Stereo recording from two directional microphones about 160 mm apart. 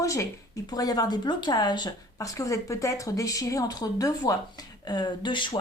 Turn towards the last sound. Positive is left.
turn(degrees=30)  # may be behind; listen again after turning